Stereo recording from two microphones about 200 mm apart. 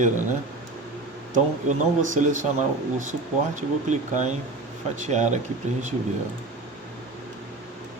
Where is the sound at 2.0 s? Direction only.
40° right (ahead or behind).